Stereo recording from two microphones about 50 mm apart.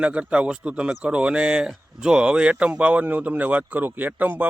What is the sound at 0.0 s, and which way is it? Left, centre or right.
Speech, right.